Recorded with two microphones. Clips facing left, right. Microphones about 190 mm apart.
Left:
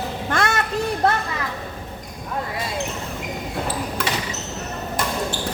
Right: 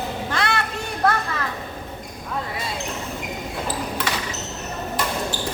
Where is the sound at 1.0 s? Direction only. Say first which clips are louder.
Even; 25° left (ahead or behind).